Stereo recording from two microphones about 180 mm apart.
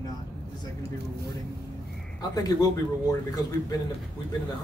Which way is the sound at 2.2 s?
20° left (ahead or behind).